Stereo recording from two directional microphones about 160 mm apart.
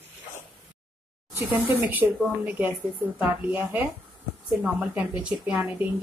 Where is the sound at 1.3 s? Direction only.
10° right (ahead or behind).